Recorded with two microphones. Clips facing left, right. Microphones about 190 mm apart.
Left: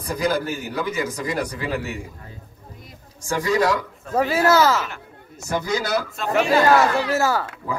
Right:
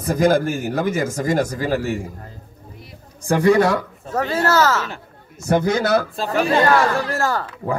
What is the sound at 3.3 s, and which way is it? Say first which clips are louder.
Speech: right 5 dB; 60° right (ahead or behind).